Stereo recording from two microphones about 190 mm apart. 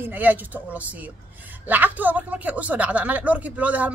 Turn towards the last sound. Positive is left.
turn(degrees=-5)  # may be behind; listen again after turning